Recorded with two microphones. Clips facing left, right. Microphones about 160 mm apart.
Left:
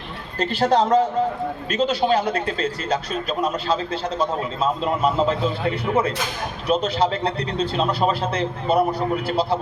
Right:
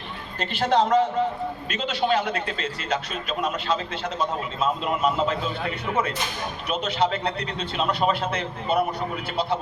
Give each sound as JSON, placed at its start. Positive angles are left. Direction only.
{"t": 0.3, "sound": "a man's voice", "side_deg": 35}
{"t": 4.2, "sound": "a man's voice", "side_deg": 35}